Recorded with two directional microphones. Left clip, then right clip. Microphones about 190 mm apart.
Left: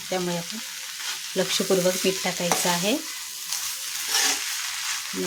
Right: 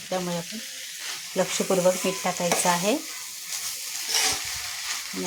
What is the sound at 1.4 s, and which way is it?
Stir, 20° left (ahead or behind).